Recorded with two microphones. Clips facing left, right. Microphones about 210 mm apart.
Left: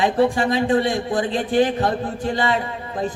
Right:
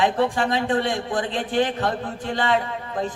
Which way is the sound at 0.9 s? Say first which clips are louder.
Left 3 dB; 40° left (ahead or behind).